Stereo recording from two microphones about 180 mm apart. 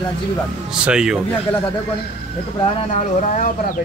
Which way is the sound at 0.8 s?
5° right (ahead or behind).